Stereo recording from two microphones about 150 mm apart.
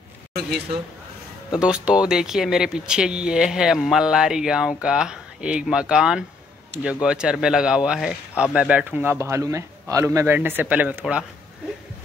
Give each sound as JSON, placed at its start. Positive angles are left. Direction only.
{"t": 1.5, "sound": "speech", "side_deg": -5}